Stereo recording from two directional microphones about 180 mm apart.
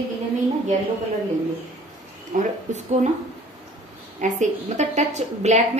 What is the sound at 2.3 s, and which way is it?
Speech, 40° right (ahead or behind).